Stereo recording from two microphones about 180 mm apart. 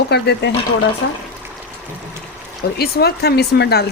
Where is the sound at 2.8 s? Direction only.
60° left (ahead or behind).